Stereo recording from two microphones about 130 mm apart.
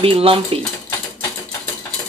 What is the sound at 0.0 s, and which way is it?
Speech, 45° right (ahead or behind).